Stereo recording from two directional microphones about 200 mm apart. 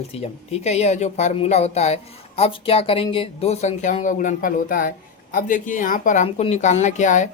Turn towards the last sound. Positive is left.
turn(degrees=40)  # may be behind; listen again after turning